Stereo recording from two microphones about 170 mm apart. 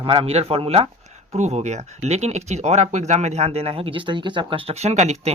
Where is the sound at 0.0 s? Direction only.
30° right (ahead or behind).